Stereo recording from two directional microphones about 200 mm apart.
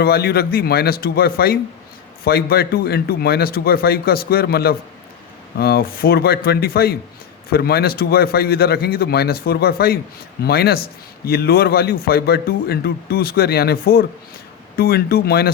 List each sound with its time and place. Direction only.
0.0 s a man's voice: 50° left (ahead or behind)